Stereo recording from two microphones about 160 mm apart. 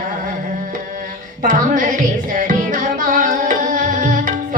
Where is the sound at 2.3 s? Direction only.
55° right (ahead or behind).